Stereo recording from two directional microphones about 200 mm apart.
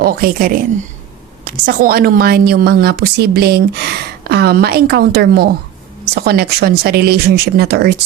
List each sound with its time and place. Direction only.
0.0 s a woman's voice: 45° right (ahead or behind)